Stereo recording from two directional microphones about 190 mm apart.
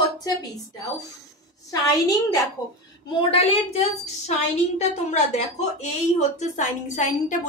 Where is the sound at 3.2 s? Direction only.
30° left (ahead or behind).